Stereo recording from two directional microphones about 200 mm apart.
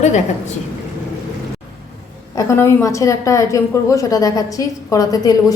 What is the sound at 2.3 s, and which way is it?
A woman's voice, 15° left (ahead or behind).